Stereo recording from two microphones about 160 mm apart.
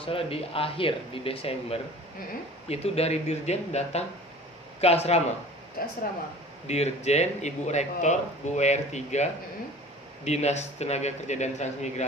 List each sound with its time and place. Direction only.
0.0 s speech: 35° left (ahead or behind)
5.8 s speech: 65° left (ahead or behind)
6.7 s speech: 45° left (ahead or behind)